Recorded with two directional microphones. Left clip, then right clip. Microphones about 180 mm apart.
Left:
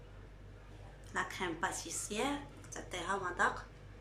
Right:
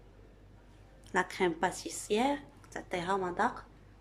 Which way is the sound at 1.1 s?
60° right (ahead or behind).